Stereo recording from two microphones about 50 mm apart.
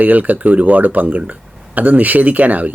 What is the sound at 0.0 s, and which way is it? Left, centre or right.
Speech, right.